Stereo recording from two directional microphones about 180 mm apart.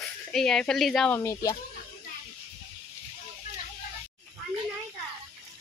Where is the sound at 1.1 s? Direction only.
15° left (ahead or behind).